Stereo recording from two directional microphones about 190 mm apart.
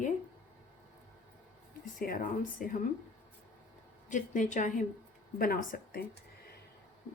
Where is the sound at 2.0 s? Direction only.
45° left (ahead or behind).